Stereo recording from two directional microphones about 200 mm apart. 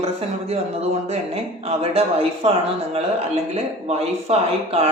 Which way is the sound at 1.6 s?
30° right (ahead or behind).